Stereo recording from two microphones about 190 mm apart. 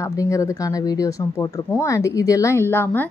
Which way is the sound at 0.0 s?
15° left (ahead or behind).